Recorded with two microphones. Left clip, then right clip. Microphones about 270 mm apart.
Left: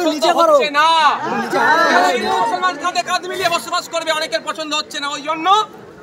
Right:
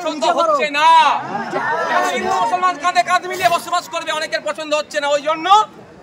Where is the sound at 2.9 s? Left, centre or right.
Centre.